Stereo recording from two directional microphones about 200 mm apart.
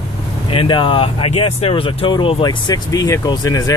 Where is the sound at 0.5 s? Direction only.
25° left (ahead or behind).